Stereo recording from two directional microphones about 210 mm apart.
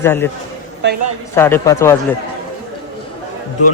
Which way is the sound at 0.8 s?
55° right (ahead or behind).